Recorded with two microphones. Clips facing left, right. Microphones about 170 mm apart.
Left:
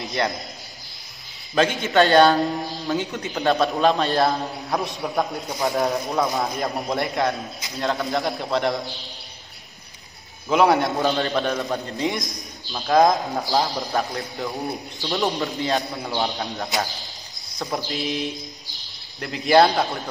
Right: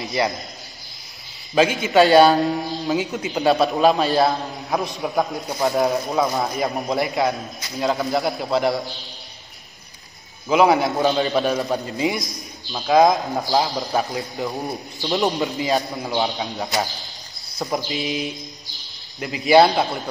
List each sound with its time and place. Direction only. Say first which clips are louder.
0.0 s a man's voice: right 2 dB; centre (ahead or behind)
1.5 s a man's voice: right 3 dB; 5° right (ahead or behind)
10.5 s a man's voice: right 2 dB; centre (ahead or behind)
14.4 s a man's voice: even; 15° right (ahead or behind)
15.3 s a man's voice: right 2 dB; centre (ahead or behind)
17.8 s a man's voice: right 1 dB; 5° right (ahead or behind)